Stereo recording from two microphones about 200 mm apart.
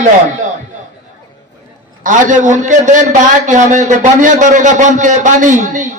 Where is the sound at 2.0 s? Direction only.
40° right (ahead or behind).